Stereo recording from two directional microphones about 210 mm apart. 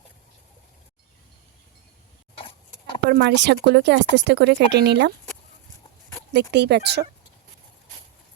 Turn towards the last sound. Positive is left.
turn(degrees=-50)  # may be behind; listen again after turning